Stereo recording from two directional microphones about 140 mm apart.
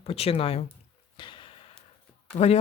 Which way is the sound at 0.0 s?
45° left (ahead or behind).